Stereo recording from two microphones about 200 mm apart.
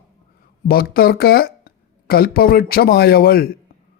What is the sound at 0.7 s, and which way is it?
Speech, 50° left (ahead or behind).